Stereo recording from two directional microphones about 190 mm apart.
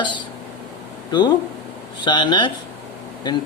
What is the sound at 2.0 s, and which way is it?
Speech, 25° left (ahead or behind).